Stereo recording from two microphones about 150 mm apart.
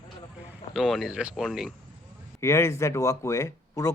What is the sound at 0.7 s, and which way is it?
Speech, centre (ahead or behind).